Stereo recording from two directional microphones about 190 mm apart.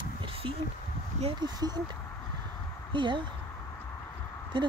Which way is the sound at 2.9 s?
25° right (ahead or behind).